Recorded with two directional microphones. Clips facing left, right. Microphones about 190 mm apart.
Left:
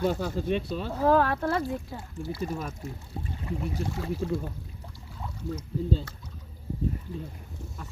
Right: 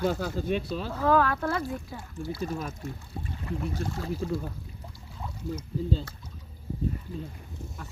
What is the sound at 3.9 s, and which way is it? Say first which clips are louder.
Speech: left 1 dB; centre (ahead or behind).